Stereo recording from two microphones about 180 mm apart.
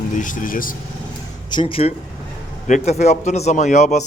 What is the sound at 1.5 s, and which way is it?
A man's voice, 30° left (ahead or behind).